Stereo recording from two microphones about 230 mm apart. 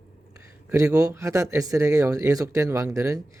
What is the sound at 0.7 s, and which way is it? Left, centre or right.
Speech, centre.